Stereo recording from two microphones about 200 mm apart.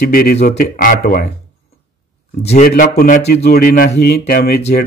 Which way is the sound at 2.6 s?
45° left (ahead or behind).